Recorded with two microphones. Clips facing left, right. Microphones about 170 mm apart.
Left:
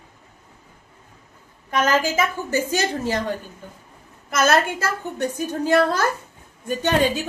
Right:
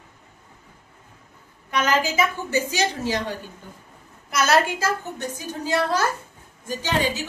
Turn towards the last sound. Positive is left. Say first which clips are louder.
# left 4 dB
turn(degrees=55)  # may be behind; listen again after turning